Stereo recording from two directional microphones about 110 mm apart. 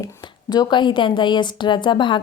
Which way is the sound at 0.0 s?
35° left (ahead or behind).